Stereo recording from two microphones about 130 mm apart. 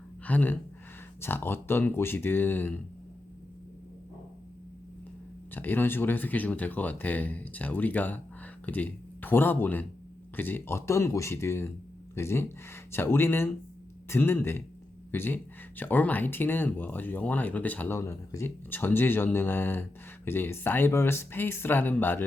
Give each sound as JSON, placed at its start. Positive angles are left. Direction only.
{"t": 0.3, "sound": "speech", "side_deg": 15}
{"t": 5.5, "sound": "speech", "side_deg": 15}